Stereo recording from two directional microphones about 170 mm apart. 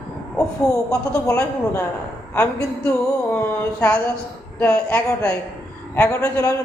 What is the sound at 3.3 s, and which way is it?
A man's voice, 15° left (ahead or behind).